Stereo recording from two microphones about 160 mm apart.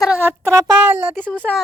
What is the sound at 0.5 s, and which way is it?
Speech, 20° right (ahead or behind).